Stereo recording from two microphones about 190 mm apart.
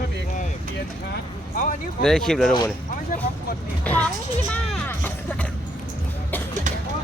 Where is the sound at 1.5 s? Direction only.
45° left (ahead or behind).